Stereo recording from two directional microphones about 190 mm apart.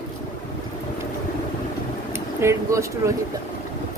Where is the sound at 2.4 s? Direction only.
15° right (ahead or behind).